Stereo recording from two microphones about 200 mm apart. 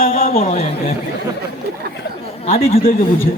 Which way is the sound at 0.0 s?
45° left (ahead or behind).